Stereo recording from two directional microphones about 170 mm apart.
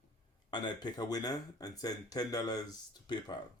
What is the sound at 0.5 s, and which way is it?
Speech, 25° left (ahead or behind).